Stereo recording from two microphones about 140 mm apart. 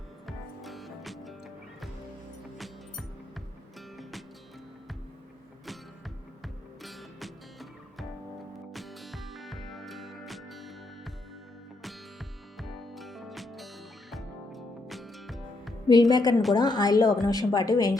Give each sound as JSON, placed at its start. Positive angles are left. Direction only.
{"t": 0.3, "sound": "music", "side_deg": 0}
{"t": 6.4, "sound": "music", "side_deg": 0}
{"t": 12.5, "sound": "music", "side_deg": 0}
{"t": 15.9, "sound": "speech", "side_deg": 30}